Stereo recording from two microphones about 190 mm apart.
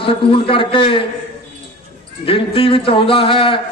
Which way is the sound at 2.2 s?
30° left (ahead or behind).